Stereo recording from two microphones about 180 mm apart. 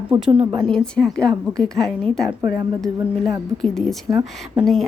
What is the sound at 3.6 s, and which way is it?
A woman's voice, centre (ahead or behind).